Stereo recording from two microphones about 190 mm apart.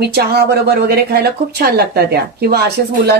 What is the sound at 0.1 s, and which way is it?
Speech, 55° right (ahead or behind).